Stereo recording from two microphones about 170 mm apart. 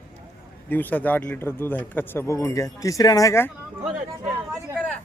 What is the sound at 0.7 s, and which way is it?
Speech, 10° left (ahead or behind).